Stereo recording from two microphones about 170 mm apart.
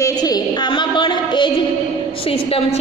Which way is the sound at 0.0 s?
20° left (ahead or behind).